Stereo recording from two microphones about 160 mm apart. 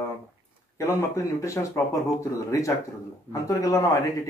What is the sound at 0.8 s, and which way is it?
A man's voice, 15° left (ahead or behind).